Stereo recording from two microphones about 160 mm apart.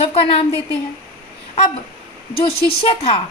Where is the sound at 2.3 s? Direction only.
35° left (ahead or behind).